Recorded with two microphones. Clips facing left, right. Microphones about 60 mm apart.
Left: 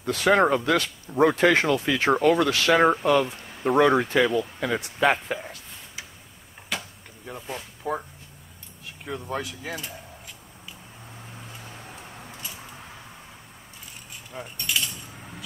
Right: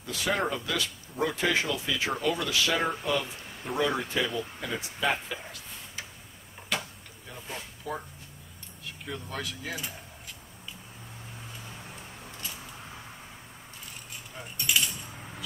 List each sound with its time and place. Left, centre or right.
0.0 s speech: left
6.7 s a sound: centre
7.8 s speech: left
9.0 s speech: left